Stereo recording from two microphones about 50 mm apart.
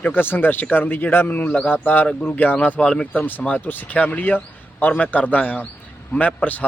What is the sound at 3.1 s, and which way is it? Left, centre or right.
Speech, left.